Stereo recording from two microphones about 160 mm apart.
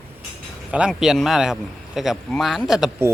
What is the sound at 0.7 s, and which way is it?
Speech, 5° right (ahead or behind).